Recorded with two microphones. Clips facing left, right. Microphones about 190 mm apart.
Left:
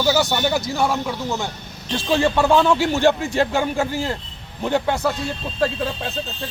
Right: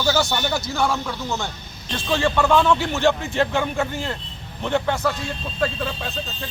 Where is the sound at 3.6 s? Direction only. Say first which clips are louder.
Left 3 dB; 35° left (ahead or behind).